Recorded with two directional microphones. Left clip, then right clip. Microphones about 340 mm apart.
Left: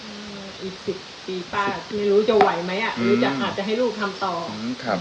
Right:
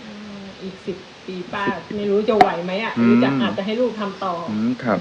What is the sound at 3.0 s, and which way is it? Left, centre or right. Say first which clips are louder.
Speech: right 4 dB; centre.